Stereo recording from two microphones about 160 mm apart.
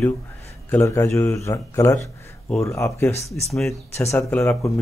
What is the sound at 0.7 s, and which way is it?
Speech, 15° left (ahead or behind).